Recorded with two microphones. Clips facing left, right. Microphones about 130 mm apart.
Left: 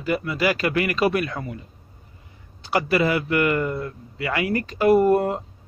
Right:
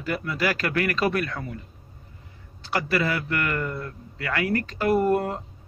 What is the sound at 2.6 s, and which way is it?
Speech, 15° left (ahead or behind).